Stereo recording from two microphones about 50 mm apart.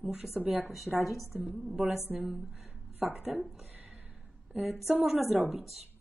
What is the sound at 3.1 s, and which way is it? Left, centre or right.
Speech, right.